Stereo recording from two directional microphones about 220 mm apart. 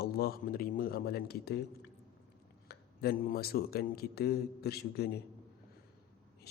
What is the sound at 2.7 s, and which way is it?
Speech, 45° left (ahead or behind).